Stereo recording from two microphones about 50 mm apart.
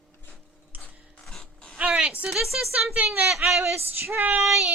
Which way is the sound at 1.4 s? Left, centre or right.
Centre.